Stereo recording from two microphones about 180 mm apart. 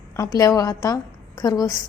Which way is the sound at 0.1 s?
20° left (ahead or behind).